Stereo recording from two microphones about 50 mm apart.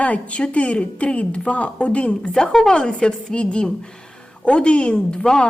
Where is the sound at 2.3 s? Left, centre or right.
Centre.